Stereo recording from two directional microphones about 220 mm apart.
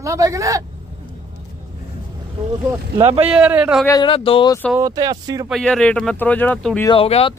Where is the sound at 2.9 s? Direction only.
25° right (ahead or behind).